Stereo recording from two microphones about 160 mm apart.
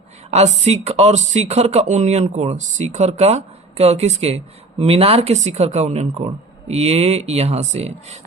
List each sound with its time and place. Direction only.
0.3 s speech: 45° right (ahead or behind)